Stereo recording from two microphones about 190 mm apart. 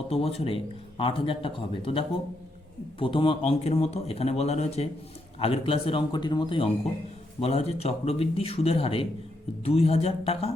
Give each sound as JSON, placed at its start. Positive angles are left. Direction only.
{"t": 0.1, "sound": "a man's voice", "side_deg": 30}